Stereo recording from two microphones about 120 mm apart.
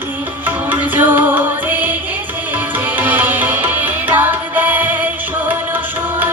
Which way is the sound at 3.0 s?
15° right (ahead or behind).